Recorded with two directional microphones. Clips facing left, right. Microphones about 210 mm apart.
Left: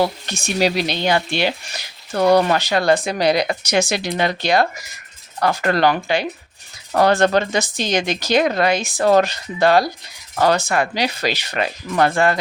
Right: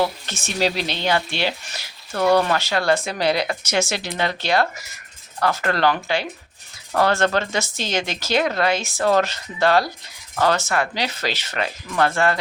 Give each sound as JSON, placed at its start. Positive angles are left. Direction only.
{"t": 0.3, "sound": "speech", "side_deg": 15}